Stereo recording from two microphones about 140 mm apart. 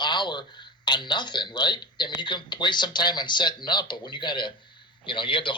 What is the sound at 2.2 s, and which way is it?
A man's voice, 35° left (ahead or behind).